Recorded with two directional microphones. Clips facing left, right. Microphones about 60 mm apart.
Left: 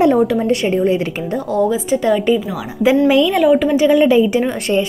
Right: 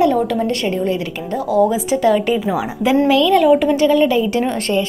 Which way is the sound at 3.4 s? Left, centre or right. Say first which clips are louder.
Even; centre.